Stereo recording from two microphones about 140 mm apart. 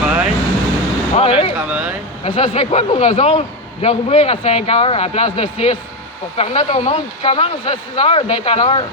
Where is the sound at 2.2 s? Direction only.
40° left (ahead or behind).